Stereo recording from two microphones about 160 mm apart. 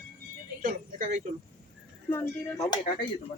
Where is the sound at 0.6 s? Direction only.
45° right (ahead or behind).